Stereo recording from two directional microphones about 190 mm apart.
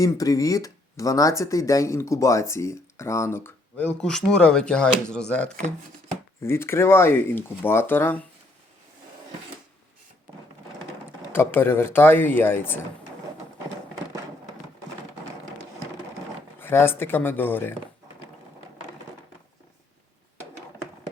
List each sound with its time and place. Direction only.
0.0 s speech: 20° left (ahead or behind)
11.3 s speech: 10° left (ahead or behind)
16.6 s speech: 10° left (ahead or behind)